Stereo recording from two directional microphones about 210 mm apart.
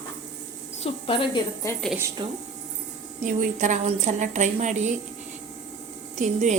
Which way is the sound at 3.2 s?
35° right (ahead or behind).